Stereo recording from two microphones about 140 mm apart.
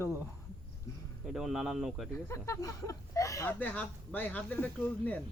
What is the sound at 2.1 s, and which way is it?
Speech, 20° left (ahead or behind).